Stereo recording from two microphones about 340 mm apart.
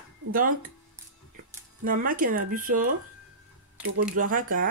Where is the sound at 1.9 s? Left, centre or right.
Right.